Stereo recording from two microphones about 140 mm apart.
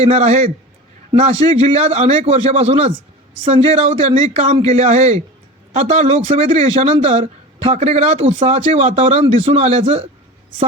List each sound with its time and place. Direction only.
0.0 s speech: 50° right (ahead or behind)